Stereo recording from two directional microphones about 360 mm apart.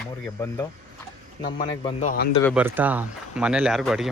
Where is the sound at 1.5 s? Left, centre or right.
Centre.